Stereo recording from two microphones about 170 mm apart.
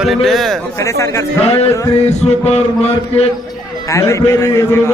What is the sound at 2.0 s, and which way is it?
Mantra, 40° left (ahead or behind).